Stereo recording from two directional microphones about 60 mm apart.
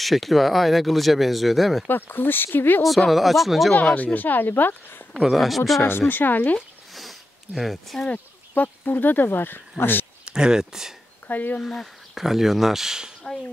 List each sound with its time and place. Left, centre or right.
0.0 s speech: centre
1.9 s speech: left
2.8 s speech: centre
3.9 s speech: left
5.1 s speech: centre
5.8 s speech: left
6.9 s sniff: centre
8.1 s speech: left
10.2 s speech: centre
11.2 s speech: left
11.6 s speech: centre
12.2 s speech: centre